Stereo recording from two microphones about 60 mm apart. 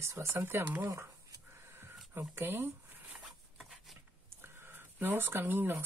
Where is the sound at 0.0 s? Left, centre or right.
Right.